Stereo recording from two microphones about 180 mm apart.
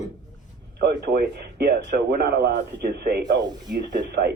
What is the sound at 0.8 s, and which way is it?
Speech, 60° right (ahead or behind).